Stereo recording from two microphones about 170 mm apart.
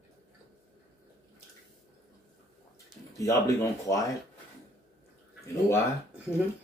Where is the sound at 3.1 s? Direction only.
20° left (ahead or behind).